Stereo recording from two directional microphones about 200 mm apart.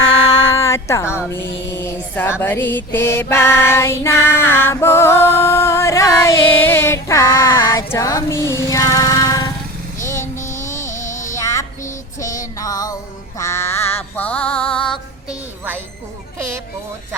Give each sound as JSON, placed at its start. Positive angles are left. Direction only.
{"t": 0.3, "sound": "music", "side_deg": 15}
{"t": 10.0, "sound": "child singing", "side_deg": 15}
{"t": 10.4, "sound": "music", "side_deg": 15}